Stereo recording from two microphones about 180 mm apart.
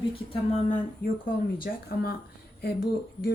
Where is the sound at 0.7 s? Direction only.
45° left (ahead or behind).